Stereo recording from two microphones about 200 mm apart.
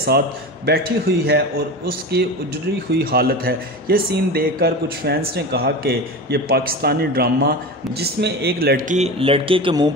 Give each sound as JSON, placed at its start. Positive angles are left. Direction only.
{"t": 0.7, "sound": "a man's voice", "side_deg": -55}